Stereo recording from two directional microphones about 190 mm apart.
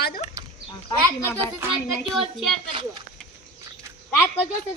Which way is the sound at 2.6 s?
25° right (ahead or behind).